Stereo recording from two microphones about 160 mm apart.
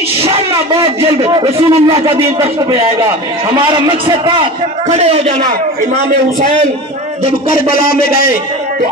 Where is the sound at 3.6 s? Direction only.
30° right (ahead or behind).